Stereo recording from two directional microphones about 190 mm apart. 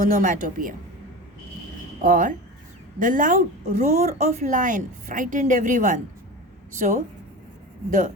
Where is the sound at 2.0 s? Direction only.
45° right (ahead or behind).